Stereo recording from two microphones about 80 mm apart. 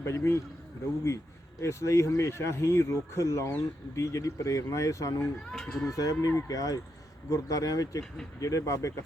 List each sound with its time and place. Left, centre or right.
0.0 s speech: left
1.6 s speech: left
5.5 s speech: centre
5.8 s speech: left